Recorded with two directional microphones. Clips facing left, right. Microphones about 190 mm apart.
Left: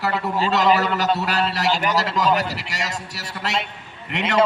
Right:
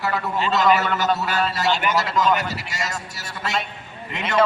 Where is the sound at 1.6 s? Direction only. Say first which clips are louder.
Even; 35° left (ahead or behind).